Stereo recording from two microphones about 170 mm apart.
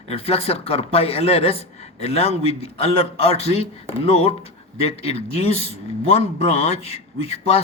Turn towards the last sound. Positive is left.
turn(degrees=35)  # may be behind; listen again after turning